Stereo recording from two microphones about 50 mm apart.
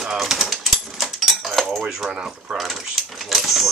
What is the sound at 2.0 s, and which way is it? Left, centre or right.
Speech, centre.